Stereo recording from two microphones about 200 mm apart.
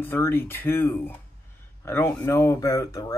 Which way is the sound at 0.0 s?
10° left (ahead or behind).